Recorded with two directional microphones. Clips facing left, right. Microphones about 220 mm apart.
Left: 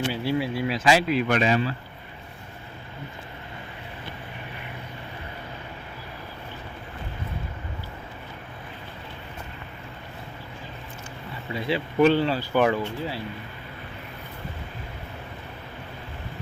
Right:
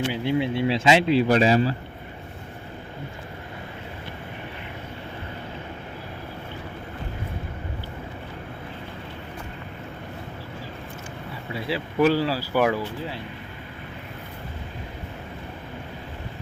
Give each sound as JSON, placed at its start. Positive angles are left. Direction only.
{"t": 0.1, "sound": "speech", "side_deg": -20}
{"t": 11.5, "sound": "speech", "side_deg": -5}